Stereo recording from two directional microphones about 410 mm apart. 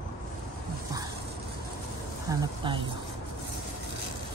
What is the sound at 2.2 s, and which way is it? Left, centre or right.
Speech, centre.